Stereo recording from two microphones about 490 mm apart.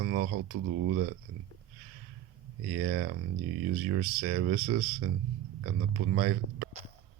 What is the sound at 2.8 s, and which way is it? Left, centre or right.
Speech, right.